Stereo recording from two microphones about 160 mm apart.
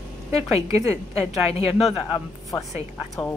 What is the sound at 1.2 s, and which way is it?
Speech, 40° left (ahead or behind).